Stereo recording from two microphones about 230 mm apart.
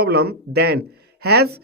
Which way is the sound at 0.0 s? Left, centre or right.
Right.